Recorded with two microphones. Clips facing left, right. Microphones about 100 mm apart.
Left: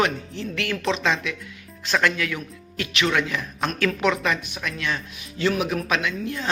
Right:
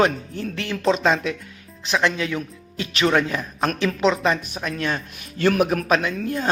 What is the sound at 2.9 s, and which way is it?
Speech, 35° right (ahead or behind).